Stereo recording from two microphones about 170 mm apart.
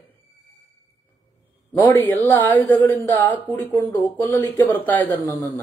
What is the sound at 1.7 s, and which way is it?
Speech, 10° left (ahead or behind).